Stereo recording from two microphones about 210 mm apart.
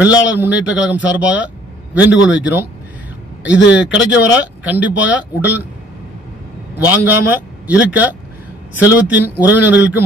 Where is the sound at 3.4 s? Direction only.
60° left (ahead or behind).